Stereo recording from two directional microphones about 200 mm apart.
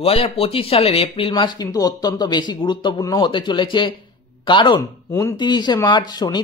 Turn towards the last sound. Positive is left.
turn(degrees=20)  # may be behind; listen again after turning